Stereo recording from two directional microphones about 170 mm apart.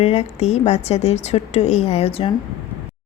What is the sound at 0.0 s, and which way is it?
Speech, 35° left (ahead or behind).